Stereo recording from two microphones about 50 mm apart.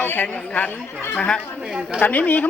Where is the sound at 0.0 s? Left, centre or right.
Left.